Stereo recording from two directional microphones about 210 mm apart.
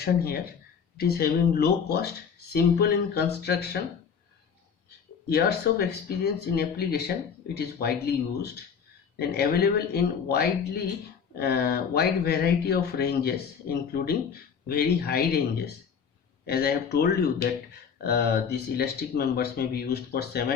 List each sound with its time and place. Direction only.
0.9 s speech: 50° left (ahead or behind)
5.3 s speech: 50° left (ahead or behind)